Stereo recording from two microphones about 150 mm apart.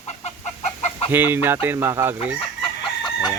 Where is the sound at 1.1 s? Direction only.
15° right (ahead or behind).